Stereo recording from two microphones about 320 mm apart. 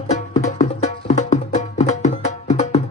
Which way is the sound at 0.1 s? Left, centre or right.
Left.